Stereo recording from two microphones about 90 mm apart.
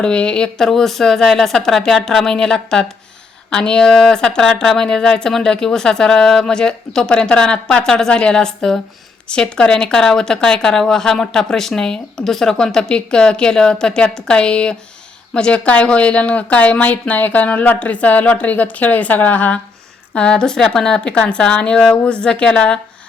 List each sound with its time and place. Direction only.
0.0 s speech: 10° left (ahead or behind)